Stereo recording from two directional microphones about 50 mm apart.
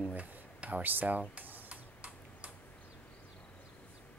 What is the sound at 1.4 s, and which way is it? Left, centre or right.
Typing, right.